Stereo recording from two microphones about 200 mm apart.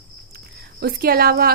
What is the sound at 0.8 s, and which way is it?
Speech, 50° right (ahead or behind).